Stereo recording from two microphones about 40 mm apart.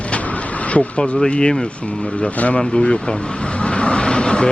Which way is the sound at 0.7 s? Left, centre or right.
Left.